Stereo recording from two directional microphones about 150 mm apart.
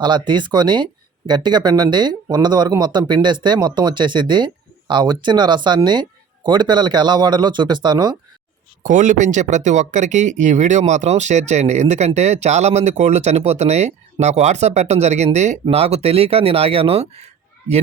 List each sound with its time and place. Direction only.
0.0 s speech: 30° right (ahead or behind)
8.8 s speech: 55° right (ahead or behind)